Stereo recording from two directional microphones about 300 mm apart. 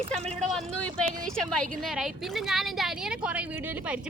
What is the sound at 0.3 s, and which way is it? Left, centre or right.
A woman's voice, centre.